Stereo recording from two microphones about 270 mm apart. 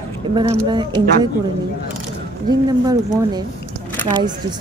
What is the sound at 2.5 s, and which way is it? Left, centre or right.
Speech, centre.